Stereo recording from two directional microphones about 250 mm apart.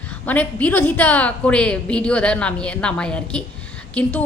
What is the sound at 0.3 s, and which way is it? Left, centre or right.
A woman's voice, centre.